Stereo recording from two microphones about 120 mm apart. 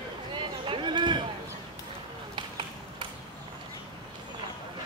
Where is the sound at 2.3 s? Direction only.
45° right (ahead or behind).